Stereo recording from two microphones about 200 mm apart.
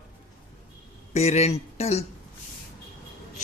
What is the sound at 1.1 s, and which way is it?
Speech, 30° left (ahead or behind).